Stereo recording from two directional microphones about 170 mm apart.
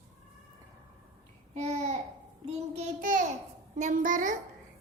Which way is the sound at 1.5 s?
40° right (ahead or behind).